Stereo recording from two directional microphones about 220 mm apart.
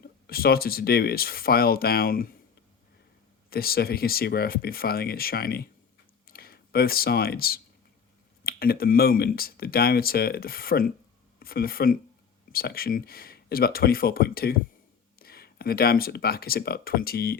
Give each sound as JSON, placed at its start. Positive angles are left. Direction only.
{"t": 0.0, "sound": "speech", "side_deg": 45}
{"t": 3.5, "sound": "speech", "side_deg": 45}